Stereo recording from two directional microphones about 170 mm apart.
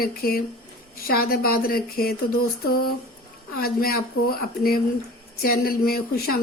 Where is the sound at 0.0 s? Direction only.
60° left (ahead or behind).